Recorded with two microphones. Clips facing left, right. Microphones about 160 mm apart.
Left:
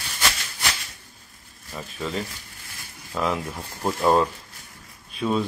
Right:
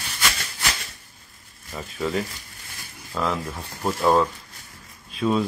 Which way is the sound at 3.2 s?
Centre (ahead or behind).